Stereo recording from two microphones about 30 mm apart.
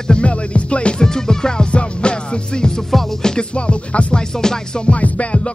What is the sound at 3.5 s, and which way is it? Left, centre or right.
Music, left.